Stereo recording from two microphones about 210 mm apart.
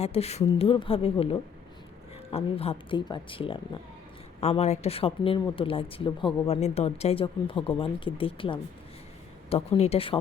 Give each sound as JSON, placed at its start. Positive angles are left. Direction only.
{"t": 0.0, "sound": "speech", "side_deg": 30}